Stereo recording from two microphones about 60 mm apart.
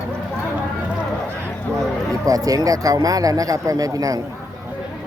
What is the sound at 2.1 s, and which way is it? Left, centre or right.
Speech, right.